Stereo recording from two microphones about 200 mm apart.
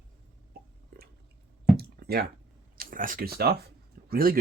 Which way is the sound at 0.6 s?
50° right (ahead or behind).